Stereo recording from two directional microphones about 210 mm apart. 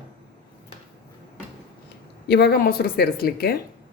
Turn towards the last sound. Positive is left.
turn(degrees=45)  # may be behind; listen again after turning